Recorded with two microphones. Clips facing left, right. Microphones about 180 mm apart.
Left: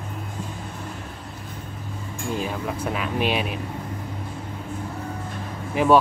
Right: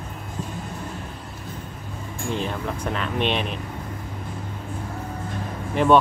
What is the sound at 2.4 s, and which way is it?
Speech, 5° left (ahead or behind).